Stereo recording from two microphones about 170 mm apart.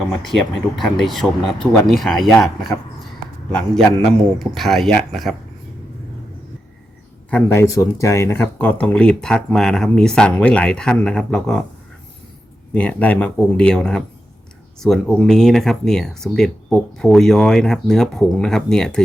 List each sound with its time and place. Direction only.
0.2 s speech: centre (ahead or behind)
4.0 s speech: centre (ahead or behind)
7.3 s speech: 10° left (ahead or behind)
12.7 s speech: 10° left (ahead or behind)